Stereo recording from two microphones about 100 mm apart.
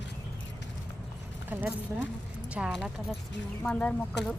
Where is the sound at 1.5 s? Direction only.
20° right (ahead or behind).